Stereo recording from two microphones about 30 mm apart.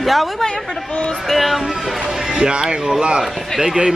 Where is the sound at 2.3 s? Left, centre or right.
Right.